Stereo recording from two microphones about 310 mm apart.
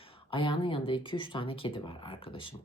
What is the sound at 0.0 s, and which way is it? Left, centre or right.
Speech, centre.